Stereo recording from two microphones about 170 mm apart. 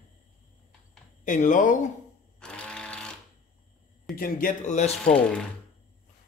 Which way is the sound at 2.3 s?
5° left (ahead or behind).